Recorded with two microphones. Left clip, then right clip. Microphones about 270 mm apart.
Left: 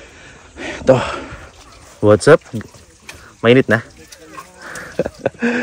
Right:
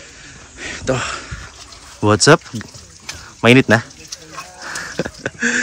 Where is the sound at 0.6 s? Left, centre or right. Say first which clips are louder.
Left 7 dB; centre.